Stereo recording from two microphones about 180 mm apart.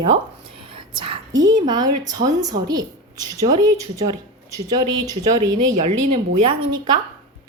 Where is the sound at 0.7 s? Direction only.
30° right (ahead or behind).